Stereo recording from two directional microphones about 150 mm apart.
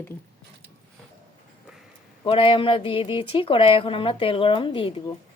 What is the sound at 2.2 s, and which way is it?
Speech, 35° left (ahead or behind).